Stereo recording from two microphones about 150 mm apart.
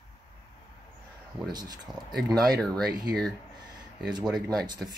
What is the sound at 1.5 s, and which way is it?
Speech, 25° right (ahead or behind).